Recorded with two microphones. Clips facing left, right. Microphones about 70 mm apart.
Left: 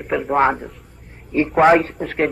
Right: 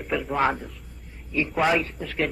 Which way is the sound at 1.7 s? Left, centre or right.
Left.